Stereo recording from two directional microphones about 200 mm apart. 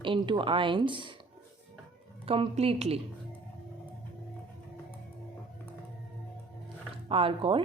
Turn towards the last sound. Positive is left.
turn(degrees=-25)  # may be behind; listen again after turning